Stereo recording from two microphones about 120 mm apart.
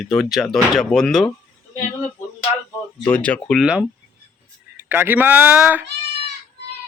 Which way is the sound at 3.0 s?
10° left (ahead or behind).